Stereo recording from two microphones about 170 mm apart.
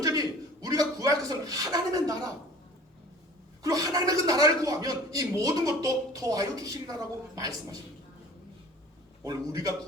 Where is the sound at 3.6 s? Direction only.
20° right (ahead or behind).